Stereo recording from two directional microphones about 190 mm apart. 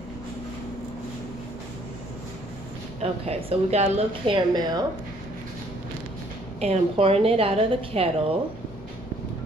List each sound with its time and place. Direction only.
3.0 s a woman's voice: 35° right (ahead or behind)
6.6 s a woman's voice: 30° right (ahead or behind)